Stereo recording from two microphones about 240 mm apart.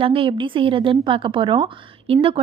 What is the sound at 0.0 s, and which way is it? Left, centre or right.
Speech, right.